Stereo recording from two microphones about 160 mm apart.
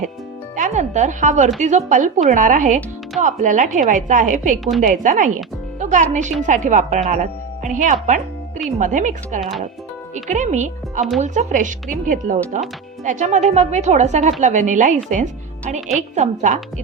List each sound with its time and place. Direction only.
0.5 s speech: 50° right (ahead or behind)
9.4 s speech: centre (ahead or behind)
10.2 s speech: 50° right (ahead or behind)